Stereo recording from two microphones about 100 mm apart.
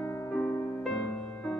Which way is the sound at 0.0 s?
25° left (ahead or behind).